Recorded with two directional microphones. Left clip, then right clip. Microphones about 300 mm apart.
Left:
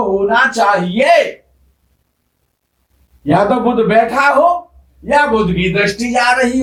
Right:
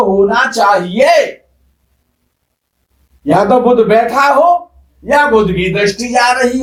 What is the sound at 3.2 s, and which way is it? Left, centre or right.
A man's voice, centre.